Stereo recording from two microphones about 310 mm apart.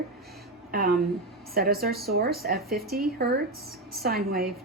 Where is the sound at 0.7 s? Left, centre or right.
Right.